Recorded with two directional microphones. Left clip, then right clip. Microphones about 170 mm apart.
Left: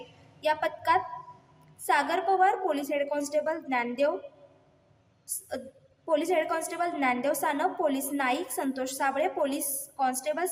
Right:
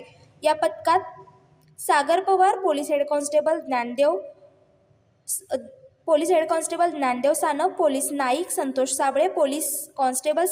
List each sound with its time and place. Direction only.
0.3 s a woman's voice: 20° right (ahead or behind)
5.3 s a woman's voice: 20° right (ahead or behind)